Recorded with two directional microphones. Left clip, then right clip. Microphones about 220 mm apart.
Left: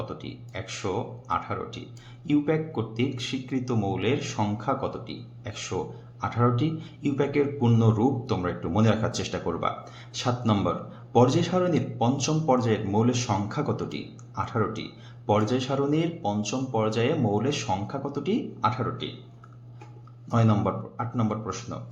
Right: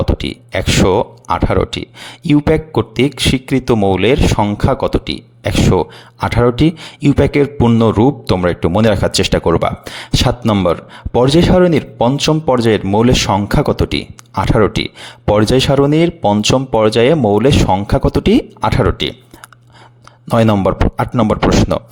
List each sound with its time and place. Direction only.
0.0 s speech: 50° right (ahead or behind)
20.2 s speech: 50° right (ahead or behind)